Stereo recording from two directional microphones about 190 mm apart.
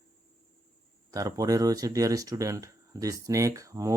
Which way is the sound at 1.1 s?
20° right (ahead or behind).